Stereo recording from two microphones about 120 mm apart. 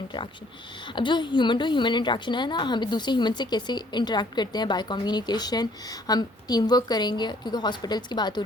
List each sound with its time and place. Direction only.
0.9 s a woman's voice: 40° left (ahead or behind)